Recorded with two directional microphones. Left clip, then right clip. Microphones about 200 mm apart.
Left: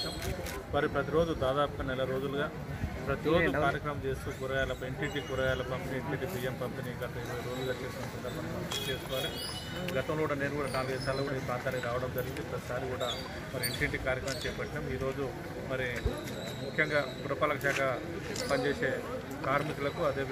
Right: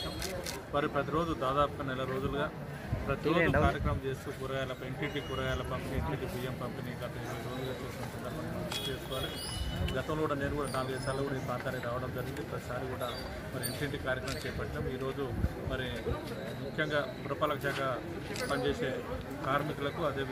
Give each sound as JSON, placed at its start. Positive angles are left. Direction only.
{"t": 0.7, "sound": "a man's voice", "side_deg": 5}
{"t": 3.3, "sound": "speech", "side_deg": -30}
{"t": 16.7, "sound": "a man's voice", "side_deg": 5}